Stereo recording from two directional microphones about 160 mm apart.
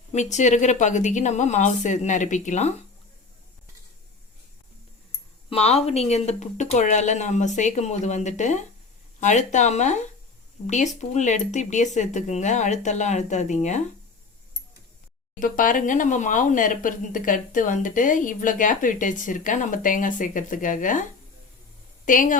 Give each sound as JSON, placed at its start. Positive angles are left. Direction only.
{"t": 0.1, "sound": "speech", "side_deg": 45}
{"t": 5.5, "sound": "speech", "side_deg": 40}
{"t": 15.4, "sound": "speech", "side_deg": 60}
{"t": 22.0, "sound": "a woman's voice", "side_deg": 55}